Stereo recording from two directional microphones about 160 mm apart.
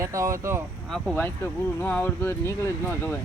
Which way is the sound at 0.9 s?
5° left (ahead or behind).